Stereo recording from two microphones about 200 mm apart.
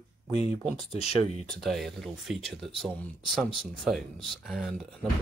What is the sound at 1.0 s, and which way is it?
Speech, 30° left (ahead or behind).